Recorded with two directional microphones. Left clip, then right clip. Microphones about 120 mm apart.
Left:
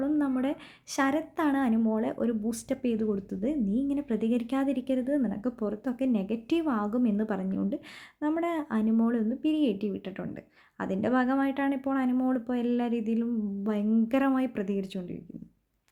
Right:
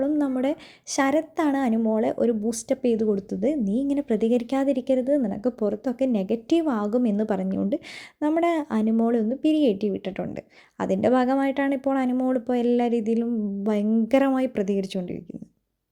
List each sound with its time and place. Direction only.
0.0 s a woman's voice: 30° right (ahead or behind); by 15.2 s 45° right (ahead or behind)